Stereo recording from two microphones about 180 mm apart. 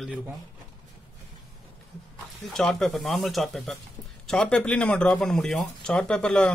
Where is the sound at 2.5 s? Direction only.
5° left (ahead or behind).